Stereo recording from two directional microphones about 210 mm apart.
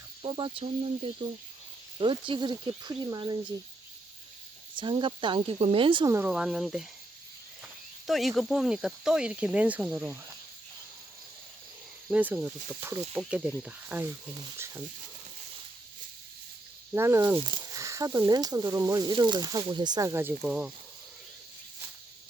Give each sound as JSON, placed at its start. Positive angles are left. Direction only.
{"t": 0.2, "sound": "speech", "side_deg": -25}
{"t": 4.7, "sound": "speech", "side_deg": -25}
{"t": 6.1, "sound": "speech", "side_deg": -5}
{"t": 12.0, "sound": "speech", "side_deg": -5}
{"t": 16.9, "sound": "speech", "side_deg": -10}
{"t": 17.3, "sound": "speech", "side_deg": -20}